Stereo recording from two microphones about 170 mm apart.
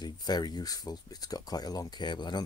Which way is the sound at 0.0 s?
25° left (ahead or behind).